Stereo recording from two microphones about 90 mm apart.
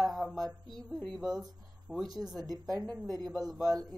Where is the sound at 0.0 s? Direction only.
Centre (ahead or behind).